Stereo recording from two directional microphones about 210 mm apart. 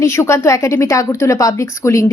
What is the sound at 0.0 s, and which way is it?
A woman's voice, 15° left (ahead or behind).